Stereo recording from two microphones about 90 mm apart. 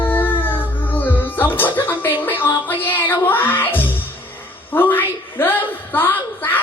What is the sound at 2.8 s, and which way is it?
Music, 20° left (ahead or behind).